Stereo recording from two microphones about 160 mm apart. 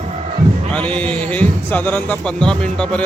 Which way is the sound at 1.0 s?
10° left (ahead or behind).